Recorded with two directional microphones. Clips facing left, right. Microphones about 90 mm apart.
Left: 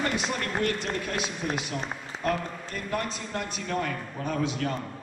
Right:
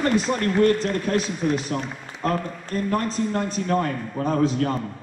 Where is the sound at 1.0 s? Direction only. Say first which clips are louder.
Right 8 dB; 40° right (ahead or behind).